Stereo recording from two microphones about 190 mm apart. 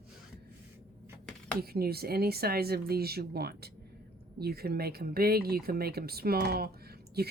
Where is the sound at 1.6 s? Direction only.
55° right (ahead or behind).